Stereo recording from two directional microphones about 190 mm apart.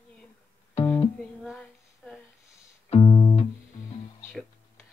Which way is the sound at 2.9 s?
30° left (ahead or behind).